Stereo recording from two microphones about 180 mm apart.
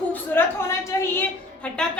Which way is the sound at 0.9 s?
15° left (ahead or behind).